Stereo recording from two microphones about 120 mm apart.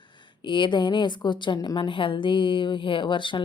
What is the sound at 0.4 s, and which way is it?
A woman's voice, 40° left (ahead or behind).